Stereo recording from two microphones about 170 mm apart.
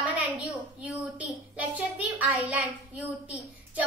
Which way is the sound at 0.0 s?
5° right (ahead or behind).